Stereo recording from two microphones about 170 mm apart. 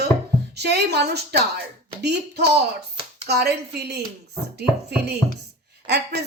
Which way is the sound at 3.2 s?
70° right (ahead or behind).